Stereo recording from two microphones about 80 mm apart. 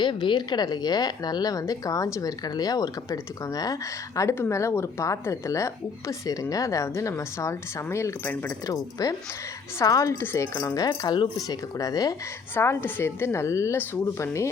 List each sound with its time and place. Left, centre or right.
0.0 s a woman's voice: left
8.6 s speech: left
10.8 s a woman's voice: left
11.4 s speech: left
12.5 s speech: left